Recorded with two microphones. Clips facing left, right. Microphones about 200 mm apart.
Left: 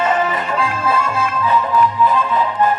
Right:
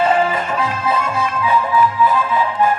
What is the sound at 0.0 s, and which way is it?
Music, 30° right (ahead or behind).